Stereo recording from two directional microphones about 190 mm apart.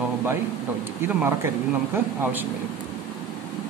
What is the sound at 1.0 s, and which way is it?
Speech, 10° right (ahead or behind).